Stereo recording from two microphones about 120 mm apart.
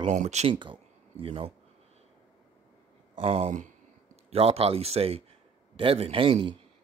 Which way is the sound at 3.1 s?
50° right (ahead or behind).